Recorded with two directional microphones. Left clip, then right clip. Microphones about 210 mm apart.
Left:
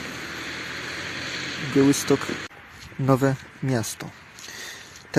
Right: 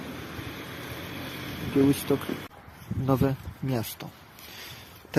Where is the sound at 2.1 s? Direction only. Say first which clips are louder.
Left 5 dB; 10° left (ahead or behind).